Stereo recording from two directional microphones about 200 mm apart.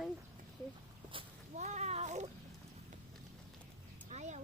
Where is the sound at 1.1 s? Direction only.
30° right (ahead or behind).